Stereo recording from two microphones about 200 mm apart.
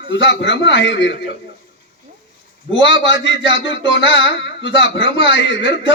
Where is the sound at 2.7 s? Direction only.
65° left (ahead or behind).